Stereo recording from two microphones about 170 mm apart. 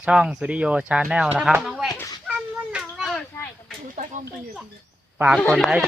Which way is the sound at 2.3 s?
5° right (ahead or behind).